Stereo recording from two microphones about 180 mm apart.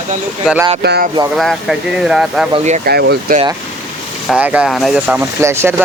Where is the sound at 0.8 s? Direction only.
65° right (ahead or behind).